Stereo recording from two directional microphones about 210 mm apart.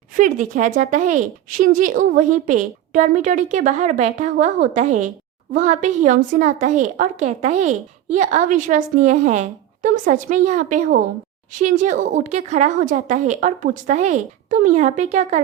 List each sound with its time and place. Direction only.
0.2 s a woman's voice: 35° right (ahead or behind)